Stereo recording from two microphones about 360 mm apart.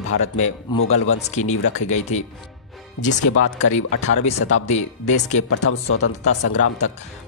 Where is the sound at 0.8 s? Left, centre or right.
Left.